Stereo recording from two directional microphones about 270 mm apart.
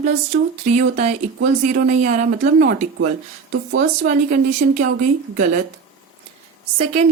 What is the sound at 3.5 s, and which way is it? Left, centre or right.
Speech, right.